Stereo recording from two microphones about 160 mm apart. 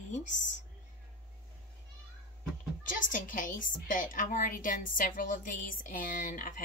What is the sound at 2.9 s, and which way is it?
A woman's voice, 55° left (ahead or behind).